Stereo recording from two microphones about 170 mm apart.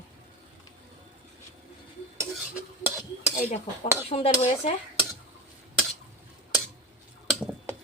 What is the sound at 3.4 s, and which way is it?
Dishes, 40° left (ahead or behind).